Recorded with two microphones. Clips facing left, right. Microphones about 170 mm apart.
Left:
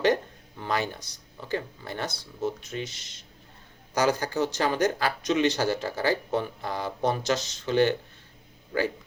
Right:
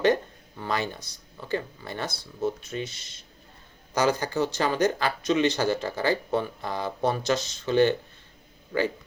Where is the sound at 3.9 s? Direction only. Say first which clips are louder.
Right 1 dB; 10° left (ahead or behind).